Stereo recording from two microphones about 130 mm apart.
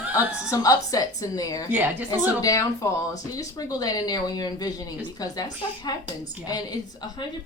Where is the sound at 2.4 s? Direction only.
25° left (ahead or behind).